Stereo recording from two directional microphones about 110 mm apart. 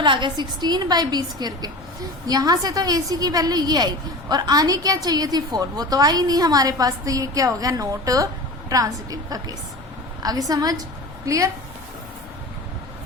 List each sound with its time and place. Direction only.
0.0 s a woman's voice: 45° right (ahead or behind); by 11.5 s 30° right (ahead or behind)